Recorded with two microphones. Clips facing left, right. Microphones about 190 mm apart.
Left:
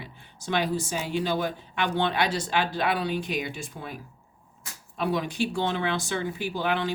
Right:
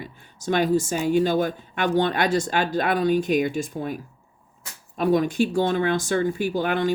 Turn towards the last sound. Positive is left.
turn(degrees=-45)  # may be behind; listen again after turning